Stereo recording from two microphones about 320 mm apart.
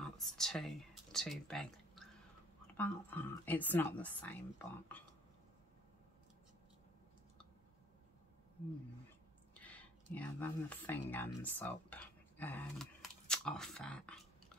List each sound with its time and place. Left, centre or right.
0.0 s speech: centre
9.5 s a sound: centre
10.1 s speech: centre